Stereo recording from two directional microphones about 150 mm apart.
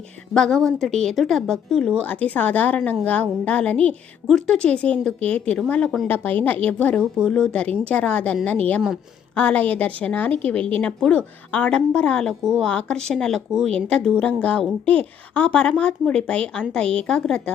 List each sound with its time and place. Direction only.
0.3 s a woman's voice: 5° left (ahead or behind)